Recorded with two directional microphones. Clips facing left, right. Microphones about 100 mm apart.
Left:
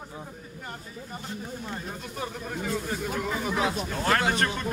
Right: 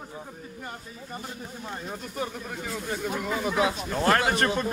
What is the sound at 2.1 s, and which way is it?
A man's voice, centre (ahead or behind).